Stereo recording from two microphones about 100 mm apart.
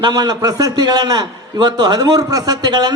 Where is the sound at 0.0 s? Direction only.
45° right (ahead or behind).